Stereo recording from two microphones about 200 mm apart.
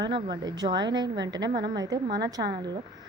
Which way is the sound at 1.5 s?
50° right (ahead or behind).